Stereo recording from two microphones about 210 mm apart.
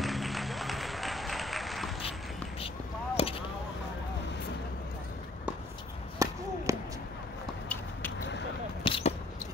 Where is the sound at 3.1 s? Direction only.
25° left (ahead or behind).